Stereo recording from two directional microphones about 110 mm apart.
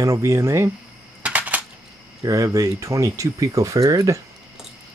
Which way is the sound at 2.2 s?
30° right (ahead or behind).